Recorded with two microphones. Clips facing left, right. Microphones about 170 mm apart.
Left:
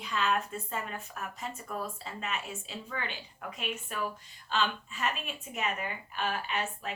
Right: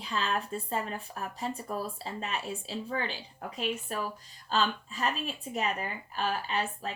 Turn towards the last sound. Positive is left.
turn(degrees=-35)  # may be behind; listen again after turning